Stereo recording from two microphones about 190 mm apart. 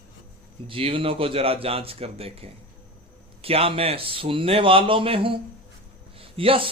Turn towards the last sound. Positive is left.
turn(degrees=-30)  # may be behind; listen again after turning